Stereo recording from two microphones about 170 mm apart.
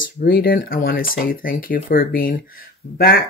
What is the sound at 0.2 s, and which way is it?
Speech, 65° left (ahead or behind).